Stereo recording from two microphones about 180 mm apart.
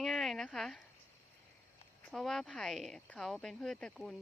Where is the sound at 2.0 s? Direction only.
5° left (ahead or behind).